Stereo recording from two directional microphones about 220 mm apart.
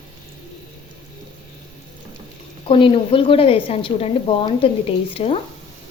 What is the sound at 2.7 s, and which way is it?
A woman's voice, 25° left (ahead or behind).